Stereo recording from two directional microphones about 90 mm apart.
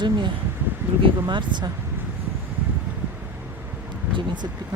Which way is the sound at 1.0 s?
60° right (ahead or behind).